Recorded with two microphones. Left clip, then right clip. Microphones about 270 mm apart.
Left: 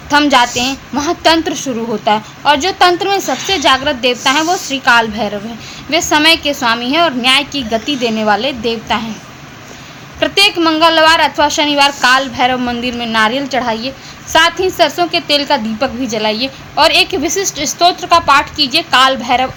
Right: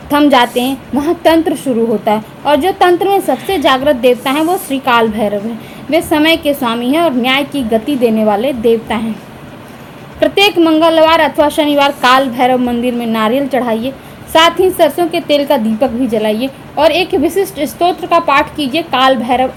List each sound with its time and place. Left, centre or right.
0.1 s a woman's voice: centre
3.5 s a woman's voice: centre
10.2 s a woman's voice: centre
11.8 s a woman's voice: left
12.1 s a woman's voice: centre